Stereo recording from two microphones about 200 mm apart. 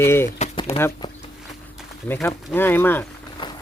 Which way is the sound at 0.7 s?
30° left (ahead or behind).